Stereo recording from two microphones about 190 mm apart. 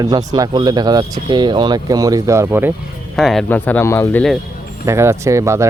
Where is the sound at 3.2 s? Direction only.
Centre (ahead or behind).